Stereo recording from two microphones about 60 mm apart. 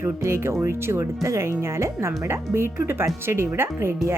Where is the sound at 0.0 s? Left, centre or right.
Right.